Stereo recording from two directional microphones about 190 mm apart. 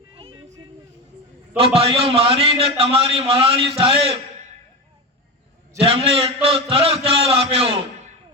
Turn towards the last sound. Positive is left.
turn(degrees=-30)  # may be behind; listen again after turning